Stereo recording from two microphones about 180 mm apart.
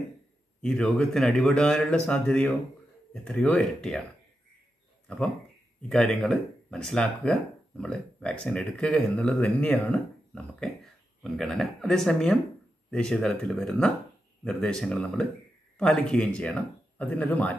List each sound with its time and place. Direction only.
0.6 s speech: 5° left (ahead or behind)
5.0 s speech: 5° left (ahead or behind)